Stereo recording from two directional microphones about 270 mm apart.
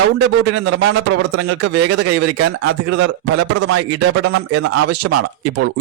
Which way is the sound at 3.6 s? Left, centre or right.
Right.